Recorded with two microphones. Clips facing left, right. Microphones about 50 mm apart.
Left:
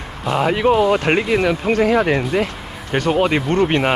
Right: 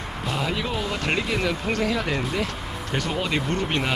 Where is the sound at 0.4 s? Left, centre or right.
Left.